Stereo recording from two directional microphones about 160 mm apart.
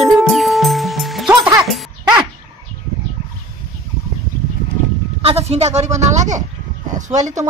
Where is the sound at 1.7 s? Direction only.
5° right (ahead or behind).